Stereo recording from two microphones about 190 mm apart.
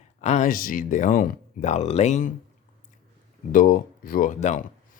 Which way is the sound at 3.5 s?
45° left (ahead or behind).